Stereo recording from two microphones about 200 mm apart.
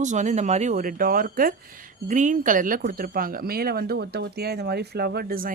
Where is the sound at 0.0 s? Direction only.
35° right (ahead or behind).